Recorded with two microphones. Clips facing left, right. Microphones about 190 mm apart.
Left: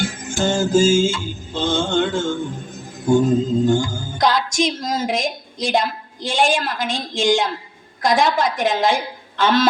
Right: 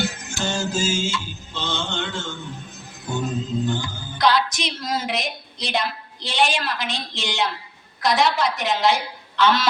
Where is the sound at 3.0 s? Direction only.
50° left (ahead or behind).